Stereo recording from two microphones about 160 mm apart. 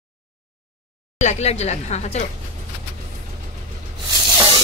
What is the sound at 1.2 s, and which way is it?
Speech, 45° left (ahead or behind).